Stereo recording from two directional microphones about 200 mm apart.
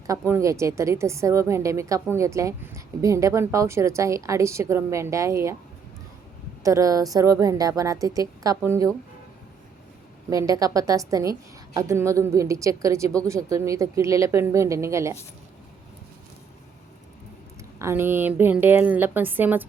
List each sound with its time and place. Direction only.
0.1 s a woman's voice: 15° right (ahead or behind)
6.6 s a woman's voice: 15° right (ahead or behind)
10.2 s a woman's voice: 15° right (ahead or behind)
17.7 s a woman's voice: 10° right (ahead or behind)